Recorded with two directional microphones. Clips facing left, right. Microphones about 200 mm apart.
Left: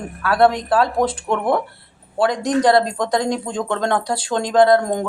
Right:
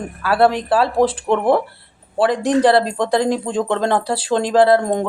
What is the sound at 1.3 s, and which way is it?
Speech, 25° right (ahead or behind).